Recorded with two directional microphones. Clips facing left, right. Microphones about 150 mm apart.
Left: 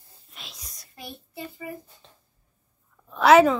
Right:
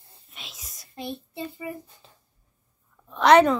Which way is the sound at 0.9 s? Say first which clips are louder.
Right 6 dB; 25° right (ahead or behind).